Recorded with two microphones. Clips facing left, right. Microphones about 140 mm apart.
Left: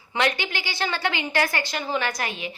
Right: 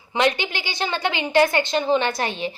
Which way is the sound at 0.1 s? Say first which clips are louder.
Right 4 dB; 20° right (ahead or behind).